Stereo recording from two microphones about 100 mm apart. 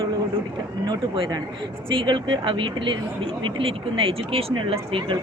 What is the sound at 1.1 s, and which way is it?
A woman's voice, 60° right (ahead or behind).